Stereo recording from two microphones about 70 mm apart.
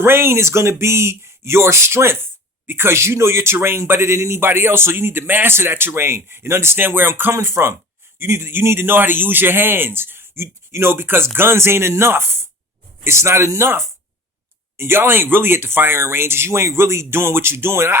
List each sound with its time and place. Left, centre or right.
0.0 s speech: right